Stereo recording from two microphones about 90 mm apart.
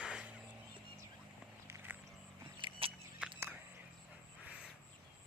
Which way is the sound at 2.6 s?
90° right.